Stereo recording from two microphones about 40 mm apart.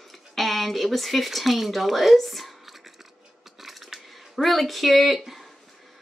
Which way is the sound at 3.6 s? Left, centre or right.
Centre.